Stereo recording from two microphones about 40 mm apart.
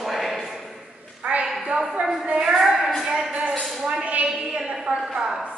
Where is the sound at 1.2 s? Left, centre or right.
Right.